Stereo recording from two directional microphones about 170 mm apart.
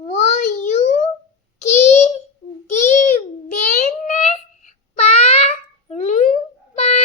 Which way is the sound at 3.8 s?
45° left (ahead or behind).